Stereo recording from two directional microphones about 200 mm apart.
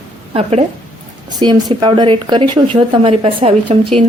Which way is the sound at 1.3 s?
20° right (ahead or behind).